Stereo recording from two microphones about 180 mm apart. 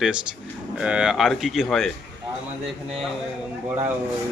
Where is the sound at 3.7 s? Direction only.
10° right (ahead or behind).